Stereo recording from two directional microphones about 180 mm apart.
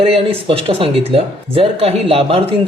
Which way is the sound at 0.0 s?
30° right (ahead or behind).